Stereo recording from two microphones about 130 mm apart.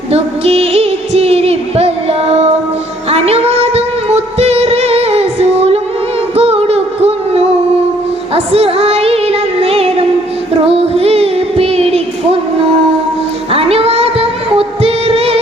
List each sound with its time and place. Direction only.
0.1 s music: 50° right (ahead or behind)
10.7 s child singing: 50° right (ahead or behind)
13.5 s singing: 50° right (ahead or behind)